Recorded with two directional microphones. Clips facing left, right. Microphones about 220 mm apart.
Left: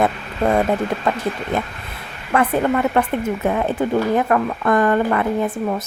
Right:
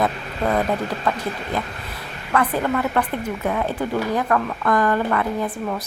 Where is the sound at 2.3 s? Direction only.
25° left (ahead or behind).